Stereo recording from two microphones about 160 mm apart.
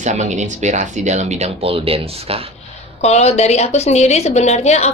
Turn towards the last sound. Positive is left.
turn(degrees=45)  # may be behind; listen again after turning